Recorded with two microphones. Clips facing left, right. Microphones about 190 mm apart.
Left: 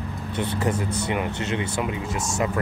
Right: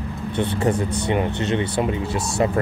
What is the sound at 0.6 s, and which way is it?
Speech, 30° right (ahead or behind).